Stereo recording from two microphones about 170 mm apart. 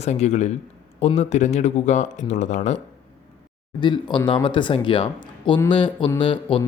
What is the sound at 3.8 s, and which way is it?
Speech, 25° left (ahead or behind).